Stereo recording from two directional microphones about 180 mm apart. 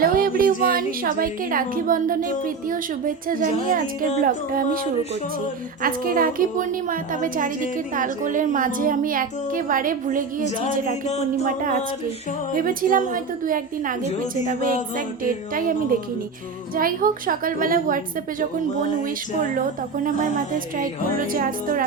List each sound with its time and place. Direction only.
0.0 s a woman's voice: 55° right (ahead or behind)
5.8 s a woman's voice: 50° right (ahead or behind)
16.7 s a woman's voice: 50° right (ahead or behind)
20.1 s a woman's voice: 45° right (ahead or behind)